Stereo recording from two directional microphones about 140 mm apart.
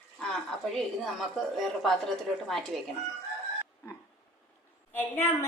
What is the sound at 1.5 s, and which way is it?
A woman's voice, centre (ahead or behind).